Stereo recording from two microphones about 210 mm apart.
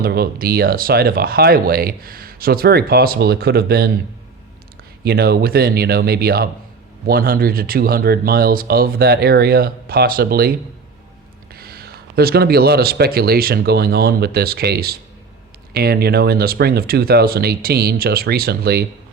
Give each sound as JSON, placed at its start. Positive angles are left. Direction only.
{"t": 0.0, "sound": "speech", "side_deg": -45}
{"t": 5.0, "sound": "speech", "side_deg": -45}
{"t": 11.5, "sound": "speech", "side_deg": -45}